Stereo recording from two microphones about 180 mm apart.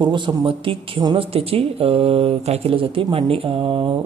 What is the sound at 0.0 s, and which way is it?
A woman's voice, 25° right (ahead or behind).